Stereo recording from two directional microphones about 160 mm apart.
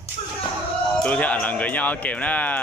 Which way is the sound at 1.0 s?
5° left (ahead or behind).